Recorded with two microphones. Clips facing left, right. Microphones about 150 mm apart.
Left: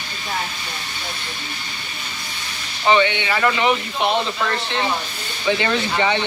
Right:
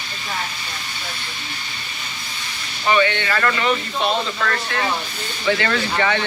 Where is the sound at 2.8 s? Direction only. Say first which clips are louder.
Left 1 dB; 20° left (ahead or behind).